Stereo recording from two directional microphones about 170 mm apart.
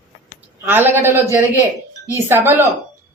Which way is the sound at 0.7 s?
10° right (ahead or behind).